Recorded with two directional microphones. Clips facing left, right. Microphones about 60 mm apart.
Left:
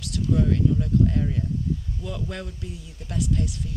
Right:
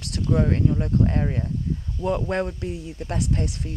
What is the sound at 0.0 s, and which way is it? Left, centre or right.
Speech, right.